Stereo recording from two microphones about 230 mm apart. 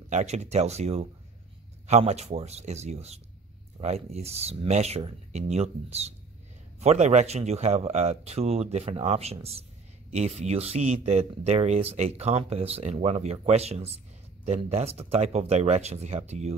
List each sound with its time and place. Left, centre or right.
0.1 s speech: right